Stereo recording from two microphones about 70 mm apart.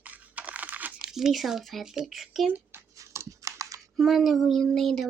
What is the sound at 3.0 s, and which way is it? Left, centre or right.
Computer keyboard, right.